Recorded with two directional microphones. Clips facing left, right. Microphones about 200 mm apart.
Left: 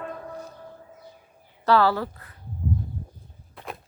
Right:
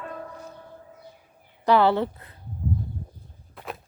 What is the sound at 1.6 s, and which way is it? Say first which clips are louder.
Speech: right 1 dB; 20° right (ahead or behind).